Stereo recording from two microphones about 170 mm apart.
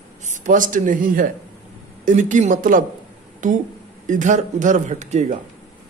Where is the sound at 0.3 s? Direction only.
50° right (ahead or behind).